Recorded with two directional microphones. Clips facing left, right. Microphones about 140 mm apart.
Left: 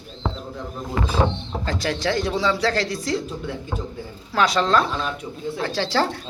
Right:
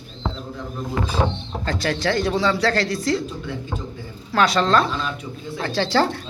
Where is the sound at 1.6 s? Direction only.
10° left (ahead or behind).